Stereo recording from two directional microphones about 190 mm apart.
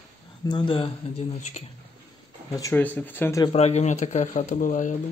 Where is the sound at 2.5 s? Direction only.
15° left (ahead or behind).